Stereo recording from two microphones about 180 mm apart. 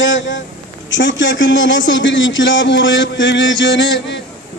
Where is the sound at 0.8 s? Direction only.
90° left.